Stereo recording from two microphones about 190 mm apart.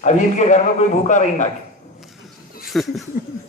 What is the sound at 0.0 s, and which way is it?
A man's voice, 40° left (ahead or behind).